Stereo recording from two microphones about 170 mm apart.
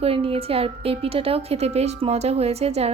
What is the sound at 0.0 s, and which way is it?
A woman's voice, 35° right (ahead or behind).